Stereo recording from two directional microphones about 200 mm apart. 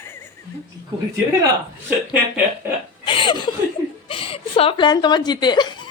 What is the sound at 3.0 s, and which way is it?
Chuckle, 25° left (ahead or behind).